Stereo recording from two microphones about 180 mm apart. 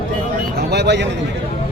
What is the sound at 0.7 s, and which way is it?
Speech, 70° right (ahead or behind).